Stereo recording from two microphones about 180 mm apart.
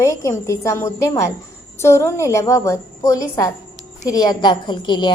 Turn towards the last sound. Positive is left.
turn(degrees=25)  # may be behind; listen again after turning